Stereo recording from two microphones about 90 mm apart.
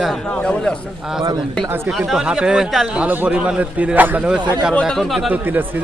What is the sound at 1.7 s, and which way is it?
Speech, 25° right (ahead or behind).